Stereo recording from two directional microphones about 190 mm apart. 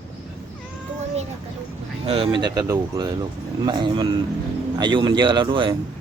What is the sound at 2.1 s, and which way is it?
Speech, 30° right (ahead or behind).